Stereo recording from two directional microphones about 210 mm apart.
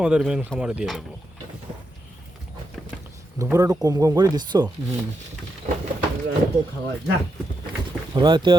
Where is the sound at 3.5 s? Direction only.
15° right (ahead or behind).